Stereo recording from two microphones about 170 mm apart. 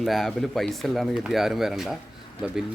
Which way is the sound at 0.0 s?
Centre (ahead or behind).